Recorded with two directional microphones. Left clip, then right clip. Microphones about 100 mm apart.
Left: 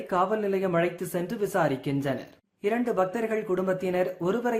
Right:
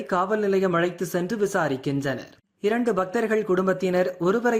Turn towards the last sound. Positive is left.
turn(degrees=-25)  # may be behind; listen again after turning